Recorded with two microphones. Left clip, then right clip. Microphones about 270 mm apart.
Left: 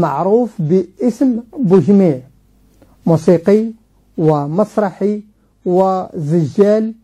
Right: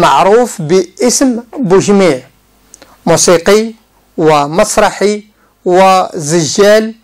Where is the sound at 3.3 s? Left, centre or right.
Centre.